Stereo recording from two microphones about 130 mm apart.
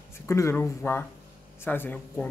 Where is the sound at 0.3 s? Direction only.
20° left (ahead or behind).